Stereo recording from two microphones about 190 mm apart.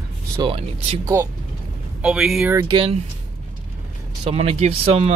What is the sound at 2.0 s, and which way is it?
Speech, 5° right (ahead or behind).